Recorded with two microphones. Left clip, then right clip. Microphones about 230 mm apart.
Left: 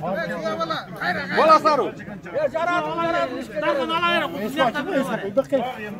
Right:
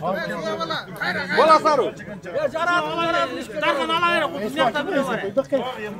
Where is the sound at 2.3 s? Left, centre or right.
Right.